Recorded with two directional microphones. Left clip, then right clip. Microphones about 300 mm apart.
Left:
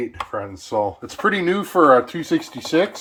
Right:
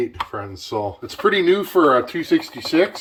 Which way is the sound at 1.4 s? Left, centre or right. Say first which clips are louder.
Even; centre.